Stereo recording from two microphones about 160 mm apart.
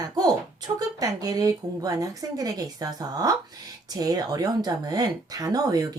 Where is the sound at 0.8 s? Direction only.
25° right (ahead or behind).